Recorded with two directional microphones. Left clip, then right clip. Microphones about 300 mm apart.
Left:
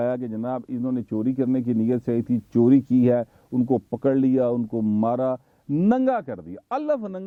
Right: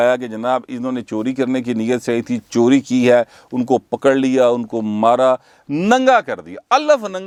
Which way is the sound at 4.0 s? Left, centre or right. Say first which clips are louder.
Right 7 dB; centre.